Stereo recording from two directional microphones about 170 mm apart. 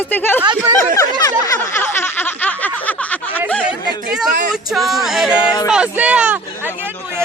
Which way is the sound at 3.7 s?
5° right (ahead or behind).